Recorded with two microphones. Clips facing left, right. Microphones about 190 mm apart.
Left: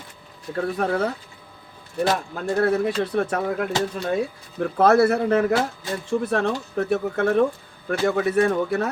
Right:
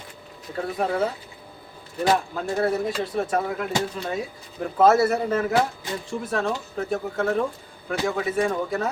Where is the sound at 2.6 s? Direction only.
65° left (ahead or behind).